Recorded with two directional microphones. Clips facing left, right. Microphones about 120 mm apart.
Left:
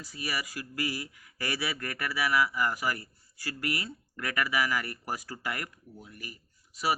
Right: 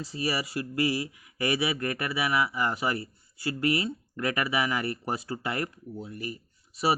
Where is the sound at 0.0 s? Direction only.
25° right (ahead or behind).